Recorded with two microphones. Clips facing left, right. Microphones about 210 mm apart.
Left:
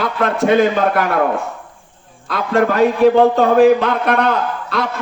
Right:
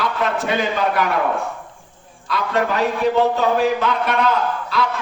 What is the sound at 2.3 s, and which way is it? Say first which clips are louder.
A man's voice: left 5 dB; 50° left (ahead or behind).